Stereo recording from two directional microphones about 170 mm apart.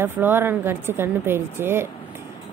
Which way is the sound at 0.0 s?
10° right (ahead or behind).